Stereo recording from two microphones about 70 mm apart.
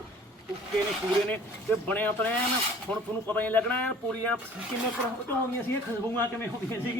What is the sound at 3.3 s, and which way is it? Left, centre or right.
Speech, left.